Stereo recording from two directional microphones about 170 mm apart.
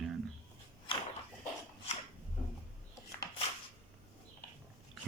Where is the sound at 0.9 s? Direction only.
30° left (ahead or behind).